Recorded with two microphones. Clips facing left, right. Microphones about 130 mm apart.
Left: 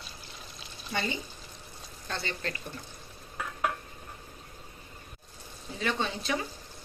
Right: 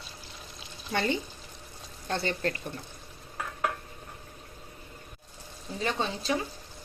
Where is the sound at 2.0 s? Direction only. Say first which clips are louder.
Right 6 dB; 45° right (ahead or behind).